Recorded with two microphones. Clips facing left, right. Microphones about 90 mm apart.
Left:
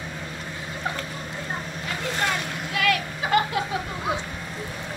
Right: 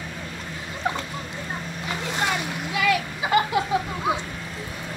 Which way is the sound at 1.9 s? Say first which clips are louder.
Right 1 dB; 10° right (ahead or behind).